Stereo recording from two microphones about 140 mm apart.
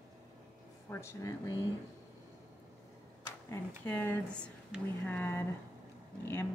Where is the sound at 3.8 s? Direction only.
10° left (ahead or behind).